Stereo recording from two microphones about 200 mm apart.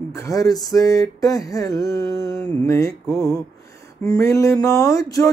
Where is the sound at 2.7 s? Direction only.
15° left (ahead or behind).